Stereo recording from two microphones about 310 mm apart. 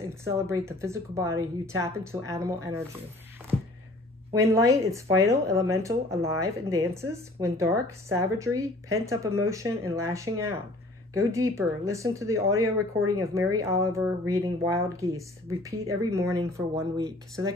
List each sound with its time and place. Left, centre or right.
0.1 s a woman's voice: centre
4.3 s a woman's voice: centre